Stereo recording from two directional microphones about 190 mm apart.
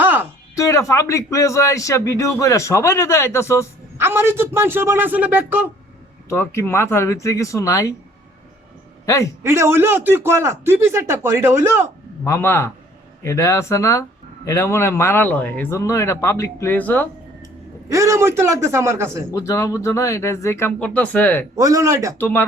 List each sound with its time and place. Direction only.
0.0 s a sound: 10° right (ahead or behind)
0.5 s a man's voice: 15° left (ahead or behind)
3.9 s a man's voice: 10° right (ahead or behind)
6.2 s a man's voice: 15° left (ahead or behind)
9.0 s a man's voice: 15° left (ahead or behind)
9.4 s a man's voice: 15° right (ahead or behind)
12.2 s a man's voice: 15° left (ahead or behind)
17.8 s a man's voice: 15° right (ahead or behind)
19.3 s a man's voice: 15° left (ahead or behind)
21.5 s a man's voice: 15° right (ahead or behind)
22.2 s a man's voice: 10° left (ahead or behind)